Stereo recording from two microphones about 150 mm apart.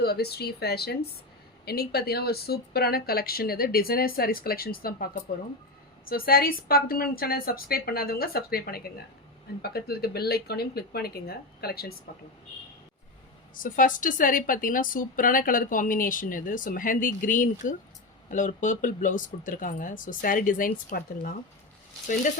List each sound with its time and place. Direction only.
0.0 s a woman's voice: 90° left
13.5 s a woman's voice: 65° left (ahead or behind)